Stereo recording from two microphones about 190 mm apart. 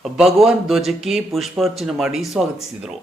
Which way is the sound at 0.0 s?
Centre (ahead or behind).